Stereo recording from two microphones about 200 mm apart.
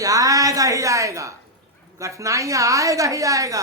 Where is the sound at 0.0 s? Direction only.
15° right (ahead or behind).